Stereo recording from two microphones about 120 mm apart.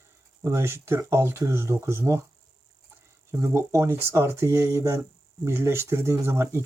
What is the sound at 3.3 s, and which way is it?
Speech, 25° right (ahead or behind).